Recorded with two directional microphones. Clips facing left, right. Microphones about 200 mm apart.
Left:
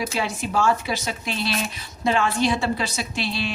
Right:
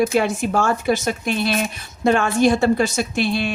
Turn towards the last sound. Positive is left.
turn(degrees=-55)  # may be behind; listen again after turning